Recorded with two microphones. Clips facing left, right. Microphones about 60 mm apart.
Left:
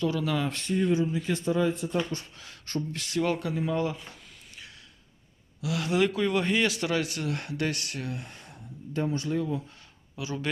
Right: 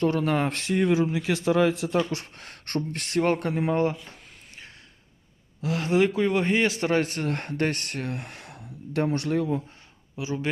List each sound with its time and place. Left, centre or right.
0.0 s speech: right
2.0 s speech: right
5.6 s speech: right
10.2 s speech: right